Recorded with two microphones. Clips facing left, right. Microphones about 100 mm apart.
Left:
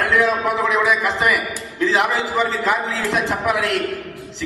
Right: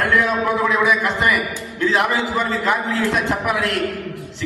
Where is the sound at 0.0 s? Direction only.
Centre (ahead or behind).